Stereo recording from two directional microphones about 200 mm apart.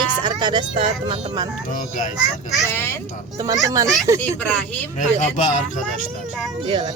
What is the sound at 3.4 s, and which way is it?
Speech, 15° right (ahead or behind).